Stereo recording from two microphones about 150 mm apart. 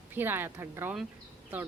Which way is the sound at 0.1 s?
15° right (ahead or behind).